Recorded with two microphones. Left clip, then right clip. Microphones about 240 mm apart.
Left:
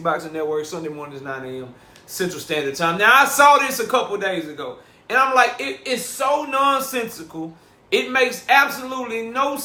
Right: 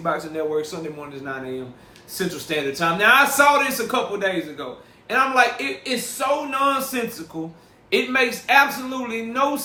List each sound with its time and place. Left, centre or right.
0.0 s a man's voice: centre